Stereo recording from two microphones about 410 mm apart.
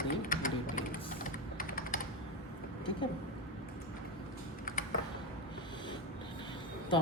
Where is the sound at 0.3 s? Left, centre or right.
Centre.